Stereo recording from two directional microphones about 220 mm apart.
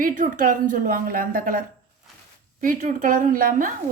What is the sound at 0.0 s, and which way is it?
A woman's voice, 35° right (ahead or behind).